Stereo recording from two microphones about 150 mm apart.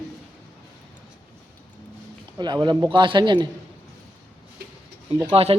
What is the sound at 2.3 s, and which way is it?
A man's voice, 30° right (ahead or behind).